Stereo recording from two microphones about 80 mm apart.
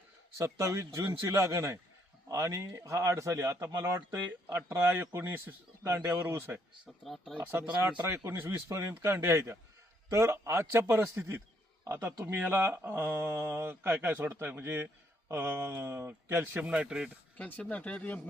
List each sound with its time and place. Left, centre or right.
0.3 s speech: right
3.9 s speech: right
7.0 s speech: centre
7.3 s speech: right
17.3 s speech: centre